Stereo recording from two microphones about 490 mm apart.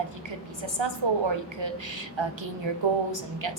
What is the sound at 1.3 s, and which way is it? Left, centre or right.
Speech, right.